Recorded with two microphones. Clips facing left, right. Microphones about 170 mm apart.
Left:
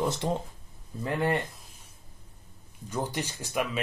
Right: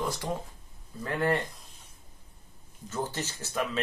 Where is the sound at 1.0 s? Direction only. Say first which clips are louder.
Even; 20° left (ahead or behind).